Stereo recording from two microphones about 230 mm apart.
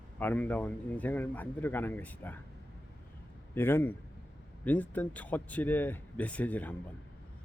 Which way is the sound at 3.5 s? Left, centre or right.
Centre.